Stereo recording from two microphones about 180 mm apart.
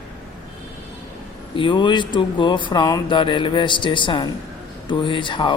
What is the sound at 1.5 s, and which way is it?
Speech, 25° left (ahead or behind).